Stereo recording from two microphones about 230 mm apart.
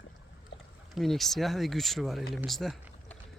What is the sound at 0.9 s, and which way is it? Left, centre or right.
Speech, centre.